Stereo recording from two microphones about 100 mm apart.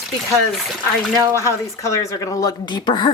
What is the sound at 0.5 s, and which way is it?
Speech, centre (ahead or behind).